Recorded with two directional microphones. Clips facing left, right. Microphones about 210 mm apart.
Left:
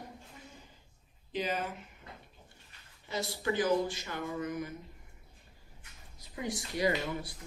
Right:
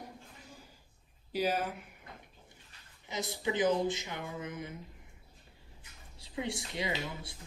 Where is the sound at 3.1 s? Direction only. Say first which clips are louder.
Even; 20° right (ahead or behind).